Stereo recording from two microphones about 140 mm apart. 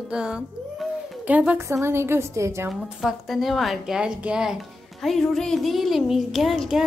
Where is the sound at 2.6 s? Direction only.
5° right (ahead or behind).